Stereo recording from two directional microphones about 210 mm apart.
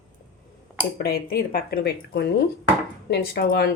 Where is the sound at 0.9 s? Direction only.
50° left (ahead or behind).